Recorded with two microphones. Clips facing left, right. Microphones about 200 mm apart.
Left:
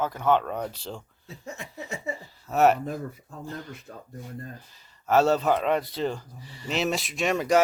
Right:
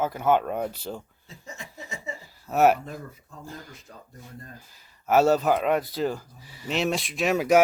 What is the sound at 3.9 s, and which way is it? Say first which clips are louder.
Speech: left 4 dB; 55° left (ahead or behind).